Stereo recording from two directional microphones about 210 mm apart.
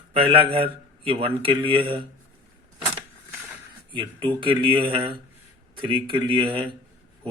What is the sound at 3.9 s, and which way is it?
A man's voice, 25° right (ahead or behind).